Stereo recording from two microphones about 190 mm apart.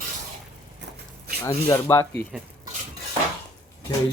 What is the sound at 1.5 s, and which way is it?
Speech, 15° left (ahead or behind).